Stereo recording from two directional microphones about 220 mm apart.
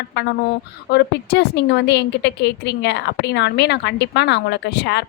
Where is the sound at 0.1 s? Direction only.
50° left (ahead or behind).